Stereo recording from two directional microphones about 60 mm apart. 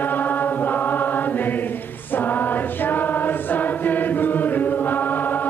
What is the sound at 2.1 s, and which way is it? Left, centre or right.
Choir, left.